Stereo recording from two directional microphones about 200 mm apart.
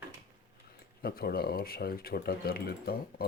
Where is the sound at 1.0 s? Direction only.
50° left (ahead or behind).